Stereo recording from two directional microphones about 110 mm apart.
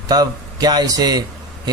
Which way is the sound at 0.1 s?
35° right (ahead or behind).